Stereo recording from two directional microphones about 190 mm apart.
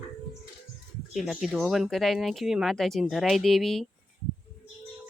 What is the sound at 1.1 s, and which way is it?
Speech, 5° right (ahead or behind).